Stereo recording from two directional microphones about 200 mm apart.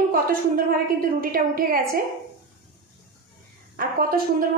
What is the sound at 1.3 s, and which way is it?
Speech, 45° right (ahead or behind).